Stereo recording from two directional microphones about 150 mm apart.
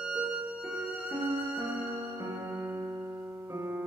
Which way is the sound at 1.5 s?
20° right (ahead or behind).